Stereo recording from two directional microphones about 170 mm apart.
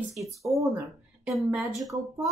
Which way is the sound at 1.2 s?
Centre (ahead or behind).